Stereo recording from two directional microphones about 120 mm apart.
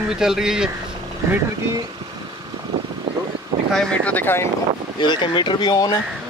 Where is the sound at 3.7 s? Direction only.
10° left (ahead or behind).